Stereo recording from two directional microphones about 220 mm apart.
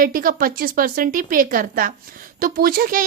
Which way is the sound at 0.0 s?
40° right (ahead or behind).